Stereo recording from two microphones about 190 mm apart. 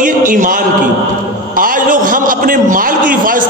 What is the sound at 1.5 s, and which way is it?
A man's voice, 45° right (ahead or behind).